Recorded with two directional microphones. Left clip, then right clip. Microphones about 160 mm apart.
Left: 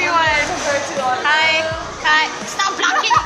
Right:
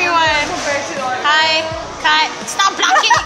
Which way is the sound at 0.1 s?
35° right (ahead or behind).